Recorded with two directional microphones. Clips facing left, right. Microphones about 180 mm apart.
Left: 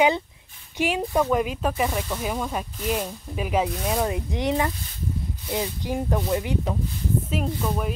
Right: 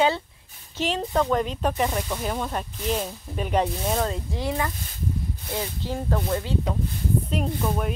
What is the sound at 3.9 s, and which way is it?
Speech, 15° left (ahead or behind).